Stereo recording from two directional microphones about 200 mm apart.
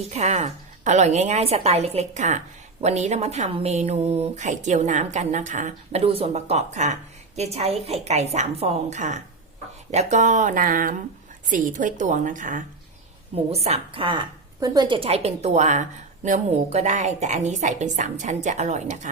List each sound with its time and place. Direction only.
0.1 s a woman's voice: 35° right (ahead or behind)
13.7 s a woman's voice: 30° right (ahead or behind)